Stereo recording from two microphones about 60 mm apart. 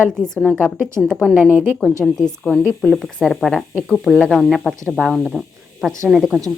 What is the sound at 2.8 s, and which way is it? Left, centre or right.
Speech, centre.